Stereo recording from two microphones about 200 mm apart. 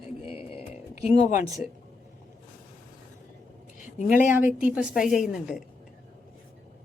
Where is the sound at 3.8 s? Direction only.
40° left (ahead or behind).